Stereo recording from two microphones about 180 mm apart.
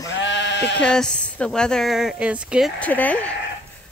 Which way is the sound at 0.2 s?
80° left.